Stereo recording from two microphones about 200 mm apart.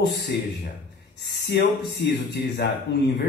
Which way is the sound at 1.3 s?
55° left (ahead or behind).